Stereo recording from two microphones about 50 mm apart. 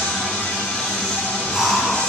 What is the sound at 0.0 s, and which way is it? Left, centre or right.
Music, centre.